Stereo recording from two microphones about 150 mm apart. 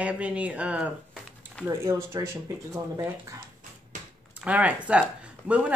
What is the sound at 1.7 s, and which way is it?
Speech, 20° right (ahead or behind).